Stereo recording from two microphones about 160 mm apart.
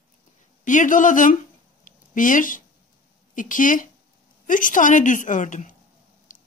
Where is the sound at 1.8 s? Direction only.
55° left (ahead or behind).